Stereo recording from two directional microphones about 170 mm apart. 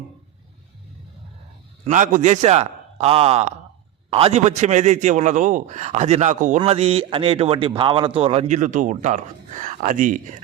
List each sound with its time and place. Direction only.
1.8 s a man's voice: 45° right (ahead or behind)